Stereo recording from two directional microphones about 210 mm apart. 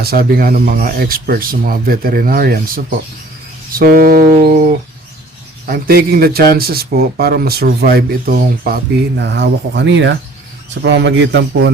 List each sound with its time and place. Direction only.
0.0 s speech: 45° right (ahead or behind)
5.6 s a man's voice: 45° right (ahead or behind)